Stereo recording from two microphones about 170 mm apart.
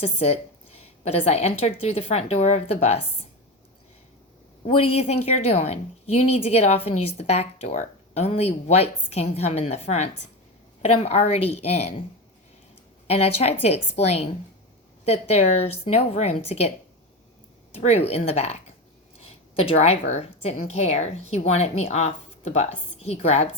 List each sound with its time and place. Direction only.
0.0 s a woman's voice: 40° left (ahead or behind)
4.6 s a woman's voice: 35° left (ahead or behind)
13.1 s a woman's voice: 40° left (ahead or behind)
17.7 s a woman's voice: 40° left (ahead or behind)